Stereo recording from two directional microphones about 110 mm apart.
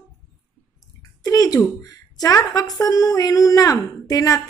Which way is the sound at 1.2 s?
35° left (ahead or behind).